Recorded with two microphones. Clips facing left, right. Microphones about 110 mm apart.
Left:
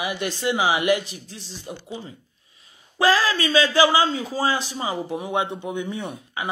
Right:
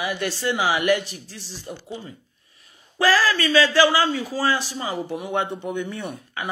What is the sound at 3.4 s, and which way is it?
A man's voice, 20° left (ahead or behind).